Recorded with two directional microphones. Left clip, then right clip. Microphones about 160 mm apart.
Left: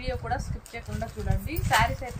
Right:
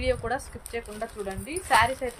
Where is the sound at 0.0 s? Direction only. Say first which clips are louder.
Right 4 dB; 90° right.